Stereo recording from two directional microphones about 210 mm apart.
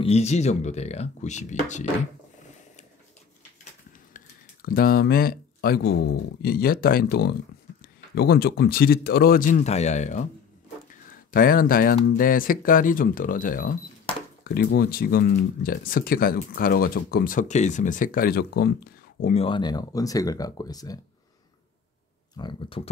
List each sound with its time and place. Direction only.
0.0 s speech: 30° left (ahead or behind)
4.1 s speech: 45° left (ahead or behind)
11.3 s speech: 40° left (ahead or behind)
19.2 s speech: 25° left (ahead or behind)
22.4 s speech: 25° left (ahead or behind)